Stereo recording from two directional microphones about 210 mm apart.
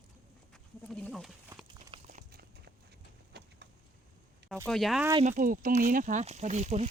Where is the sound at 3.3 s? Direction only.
50° right (ahead or behind).